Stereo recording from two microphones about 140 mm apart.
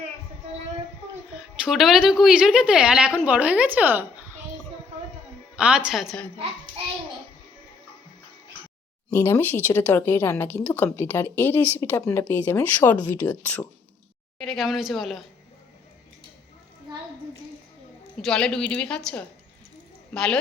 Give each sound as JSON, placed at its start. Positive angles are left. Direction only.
{"t": 1.6, "sound": "a woman's voice", "side_deg": 0}
{"t": 5.5, "sound": "a woman's voice", "side_deg": -5}
{"t": 9.1, "sound": "speech", "side_deg": 15}
{"t": 14.3, "sound": "a woman's voice", "side_deg": 0}
{"t": 18.2, "sound": "a woman's voice", "side_deg": 5}